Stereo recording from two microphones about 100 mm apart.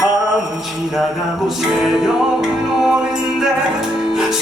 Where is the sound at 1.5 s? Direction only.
Centre (ahead or behind).